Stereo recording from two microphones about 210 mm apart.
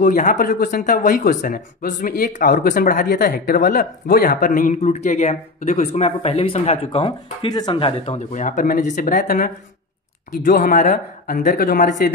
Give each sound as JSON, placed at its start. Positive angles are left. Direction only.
{"t": 0.0, "sound": "speech", "side_deg": 35}